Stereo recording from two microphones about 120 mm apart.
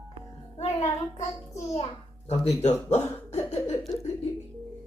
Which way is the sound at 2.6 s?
65° left (ahead or behind).